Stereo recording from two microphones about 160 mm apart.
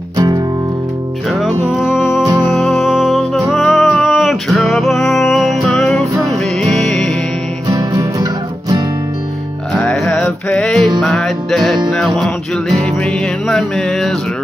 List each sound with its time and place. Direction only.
1.3 s music: centre (ahead or behind)
7.6 s music: 20° right (ahead or behind)
9.8 s music: 10° left (ahead or behind)